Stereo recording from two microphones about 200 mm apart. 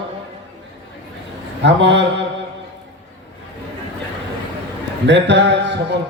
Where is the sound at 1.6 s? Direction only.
60° right (ahead or behind).